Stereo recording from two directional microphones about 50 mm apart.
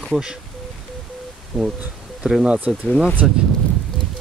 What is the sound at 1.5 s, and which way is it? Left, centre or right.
Speech, centre.